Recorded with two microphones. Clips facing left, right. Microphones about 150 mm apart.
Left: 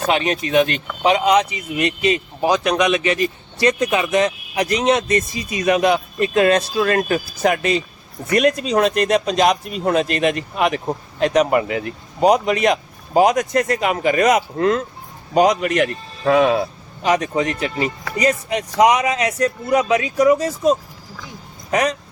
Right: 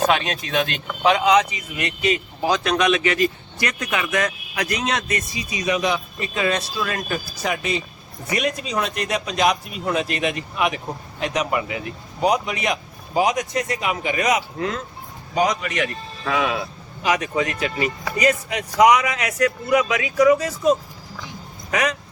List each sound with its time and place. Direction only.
0.1 s speech: 20° left (ahead or behind)
5.4 s speech: 55° left (ahead or behind)
8.7 s speech: 40° left (ahead or behind)